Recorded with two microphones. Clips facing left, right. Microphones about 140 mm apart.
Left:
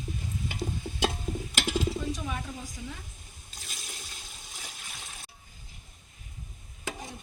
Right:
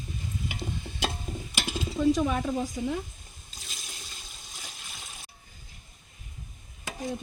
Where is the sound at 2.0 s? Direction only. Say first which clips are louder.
Right 10 dB; 75° right (ahead or behind).